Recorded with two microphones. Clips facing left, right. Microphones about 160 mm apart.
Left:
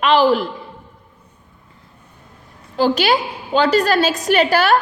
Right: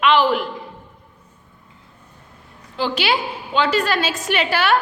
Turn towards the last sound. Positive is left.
turn(degrees=40)  # may be behind; listen again after turning